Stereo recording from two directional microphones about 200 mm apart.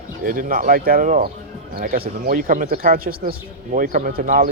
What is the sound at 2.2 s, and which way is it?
Speech, 40° right (ahead or behind).